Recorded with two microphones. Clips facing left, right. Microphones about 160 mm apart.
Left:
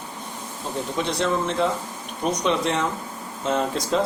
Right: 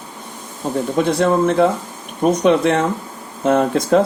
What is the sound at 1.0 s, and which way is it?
Speech, 55° right (ahead or behind).